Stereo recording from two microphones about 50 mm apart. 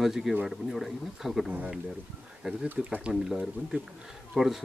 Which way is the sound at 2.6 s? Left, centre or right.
Right.